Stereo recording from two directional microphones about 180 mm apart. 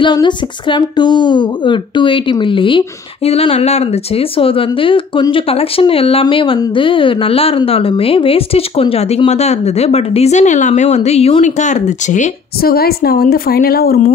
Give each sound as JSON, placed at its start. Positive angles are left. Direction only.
{"t": 0.0, "sound": "speech", "side_deg": 25}